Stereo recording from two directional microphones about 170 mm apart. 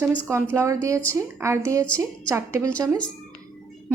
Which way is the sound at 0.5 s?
20° right (ahead or behind).